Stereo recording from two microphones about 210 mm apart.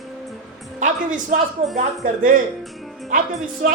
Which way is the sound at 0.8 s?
40° right (ahead or behind).